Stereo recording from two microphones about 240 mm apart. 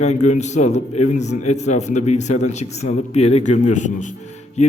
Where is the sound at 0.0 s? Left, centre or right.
Left.